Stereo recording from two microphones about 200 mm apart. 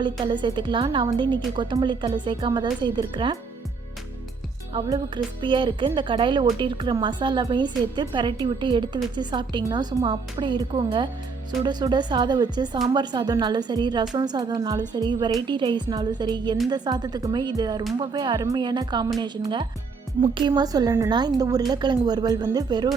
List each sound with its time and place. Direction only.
0.0 s speech: 25° right (ahead or behind)
4.7 s speech: 25° right (ahead or behind)